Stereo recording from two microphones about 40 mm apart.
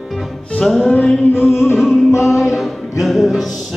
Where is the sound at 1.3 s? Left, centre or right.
Left.